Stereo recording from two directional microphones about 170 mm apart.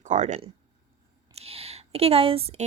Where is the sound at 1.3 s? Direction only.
35° right (ahead or behind).